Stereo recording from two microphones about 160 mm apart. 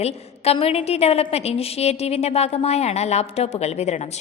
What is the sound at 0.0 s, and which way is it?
A woman's voice, 40° left (ahead or behind).